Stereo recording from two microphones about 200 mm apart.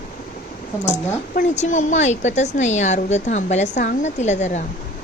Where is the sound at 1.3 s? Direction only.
35° left (ahead or behind).